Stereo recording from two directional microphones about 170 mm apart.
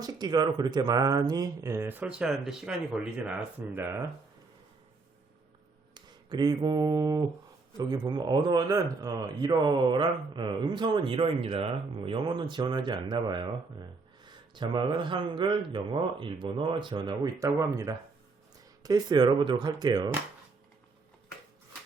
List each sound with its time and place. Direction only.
0.0 s speech: 25° right (ahead or behind)
5.9 s a sound: 25° right (ahead or behind)
7.9 s speech: 25° right (ahead or behind)